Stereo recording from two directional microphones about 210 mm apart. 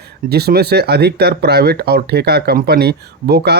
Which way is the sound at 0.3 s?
50° right (ahead or behind).